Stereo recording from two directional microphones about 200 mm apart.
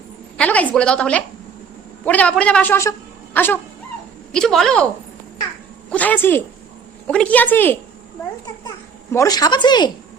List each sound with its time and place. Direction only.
0.3 s a woman's voice: 5° left (ahead or behind)
5.9 s a man's voice: 10° left (ahead or behind)
9.1 s speech: 20° left (ahead or behind)